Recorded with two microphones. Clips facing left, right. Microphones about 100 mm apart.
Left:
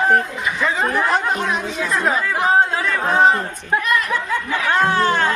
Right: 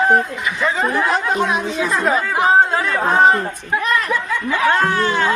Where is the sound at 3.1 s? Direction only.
20° right (ahead or behind).